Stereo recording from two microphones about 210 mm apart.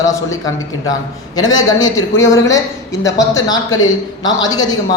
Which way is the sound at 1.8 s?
15° left (ahead or behind).